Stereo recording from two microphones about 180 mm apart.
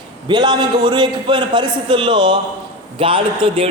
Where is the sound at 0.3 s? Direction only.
25° right (ahead or behind).